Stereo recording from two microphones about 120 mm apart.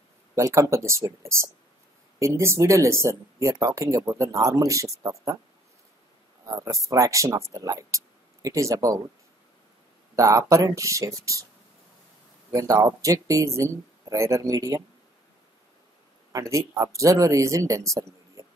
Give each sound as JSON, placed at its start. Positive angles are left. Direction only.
{"t": 0.4, "sound": "speech", "side_deg": -25}
{"t": 2.1, "sound": "speech", "side_deg": -25}
{"t": 6.6, "sound": "speech", "side_deg": -25}
{"t": 10.1, "sound": "speech", "side_deg": -25}
{"t": 12.5, "sound": "speech", "side_deg": -30}
{"t": 16.3, "sound": "speech", "side_deg": -25}